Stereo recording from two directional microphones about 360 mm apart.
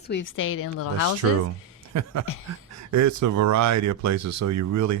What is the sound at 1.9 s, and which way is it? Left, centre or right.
Speech, right.